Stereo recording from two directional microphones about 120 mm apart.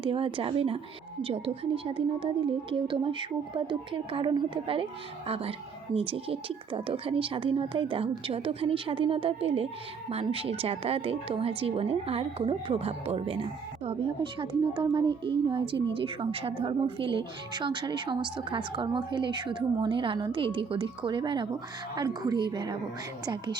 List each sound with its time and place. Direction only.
0.0 s a woman's voice: 45° right (ahead or behind)